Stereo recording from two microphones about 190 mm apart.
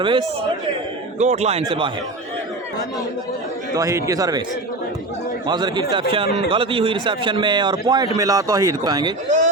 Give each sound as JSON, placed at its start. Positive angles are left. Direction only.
{"t": 0.0, "sound": "a man's voice", "side_deg": -25}
{"t": 1.2, "sound": "a man's voice", "side_deg": -35}
{"t": 3.8, "sound": "a man's voice", "side_deg": -15}
{"t": 5.5, "sound": "a man's voice", "side_deg": -20}